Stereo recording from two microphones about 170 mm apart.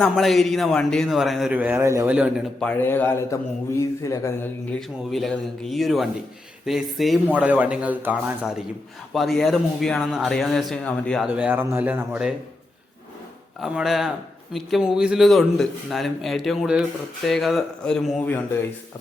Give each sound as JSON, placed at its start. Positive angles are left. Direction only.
{"t": 0.0, "sound": "a man's voice", "side_deg": 0}
{"t": 2.6, "sound": "a man's voice", "side_deg": 10}
{"t": 4.7, "sound": "a man's voice", "side_deg": 0}
{"t": 11.3, "sound": "speech", "side_deg": -10}
{"t": 13.6, "sound": "a man's voice", "side_deg": -5}